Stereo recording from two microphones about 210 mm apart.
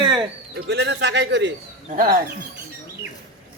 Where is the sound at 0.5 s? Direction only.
55° right (ahead or behind).